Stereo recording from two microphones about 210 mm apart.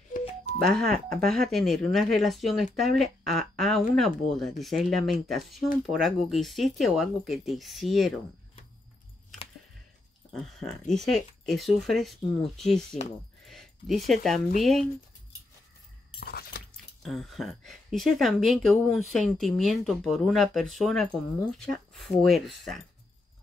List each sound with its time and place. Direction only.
0.7 s speech: centre (ahead or behind)
10.3 s speech: centre (ahead or behind)
16.2 s keys jangling: 50° left (ahead or behind)
17.0 s speech: centre (ahead or behind)